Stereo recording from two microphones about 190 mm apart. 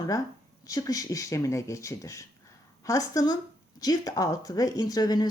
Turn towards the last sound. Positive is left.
turn(degrees=20)  # may be behind; listen again after turning